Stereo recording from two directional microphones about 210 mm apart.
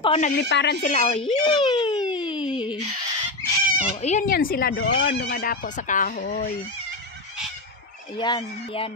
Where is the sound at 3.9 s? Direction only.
30° left (ahead or behind).